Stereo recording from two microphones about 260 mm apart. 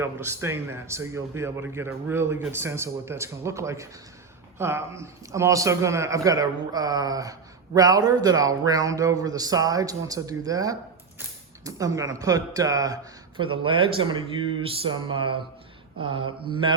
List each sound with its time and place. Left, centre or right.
0.0 s a man's voice: centre